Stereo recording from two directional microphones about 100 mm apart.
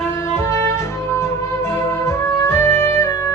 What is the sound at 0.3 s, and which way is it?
Music, 25° left (ahead or behind).